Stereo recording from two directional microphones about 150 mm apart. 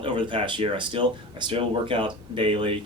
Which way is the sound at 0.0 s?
35° right (ahead or behind).